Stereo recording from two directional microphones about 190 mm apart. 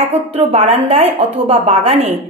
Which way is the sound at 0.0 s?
35° right (ahead or behind).